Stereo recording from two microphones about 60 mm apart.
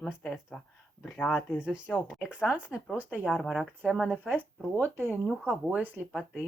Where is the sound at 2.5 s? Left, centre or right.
Right.